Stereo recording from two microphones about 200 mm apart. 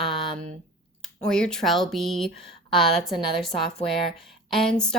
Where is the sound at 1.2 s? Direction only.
5° left (ahead or behind).